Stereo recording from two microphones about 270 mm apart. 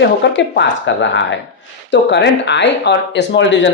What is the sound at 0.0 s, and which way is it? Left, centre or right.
Speech, left.